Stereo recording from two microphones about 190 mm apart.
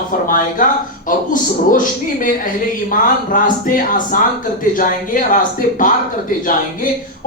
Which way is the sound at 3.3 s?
45° left (ahead or behind).